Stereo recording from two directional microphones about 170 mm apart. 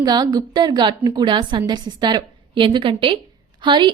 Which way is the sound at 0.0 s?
25° right (ahead or behind).